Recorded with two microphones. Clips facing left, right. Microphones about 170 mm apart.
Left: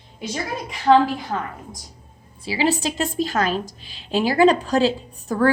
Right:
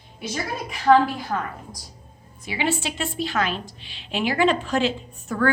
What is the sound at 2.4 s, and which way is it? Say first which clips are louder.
A woman's voice: left 4 dB; 35° left (ahead or behind).